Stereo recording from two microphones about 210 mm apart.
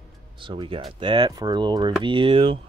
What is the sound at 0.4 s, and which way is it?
Speech, 25° right (ahead or behind).